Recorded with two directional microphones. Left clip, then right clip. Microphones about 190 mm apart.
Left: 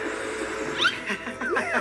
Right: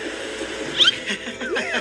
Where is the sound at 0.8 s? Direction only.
45° right (ahead or behind).